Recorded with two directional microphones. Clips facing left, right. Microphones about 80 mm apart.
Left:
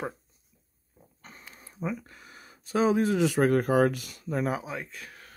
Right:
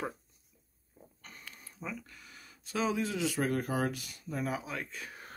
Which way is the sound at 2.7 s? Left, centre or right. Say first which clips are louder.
Left 8 dB; left.